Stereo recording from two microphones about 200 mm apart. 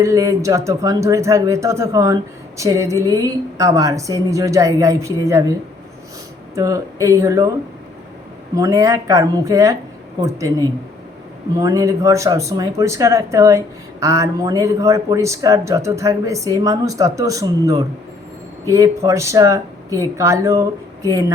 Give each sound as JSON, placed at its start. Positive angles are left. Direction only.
{"t": 0.0, "sound": "speech", "side_deg": -15}
{"t": 6.6, "sound": "speech", "side_deg": -15}
{"t": 8.5, "sound": "speech", "side_deg": -15}
{"t": 11.5, "sound": "speech", "side_deg": -15}